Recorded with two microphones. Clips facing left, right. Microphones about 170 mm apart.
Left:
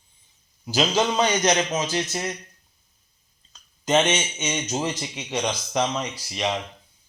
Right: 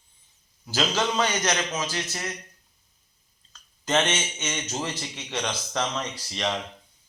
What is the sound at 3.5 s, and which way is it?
A man's voice, 15° left (ahead or behind).